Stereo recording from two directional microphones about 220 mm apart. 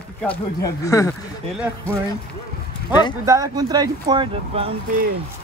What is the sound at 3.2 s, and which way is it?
Speech, 15° right (ahead or behind).